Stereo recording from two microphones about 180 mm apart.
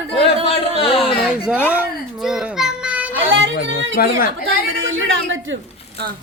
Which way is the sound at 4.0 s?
55° left (ahead or behind).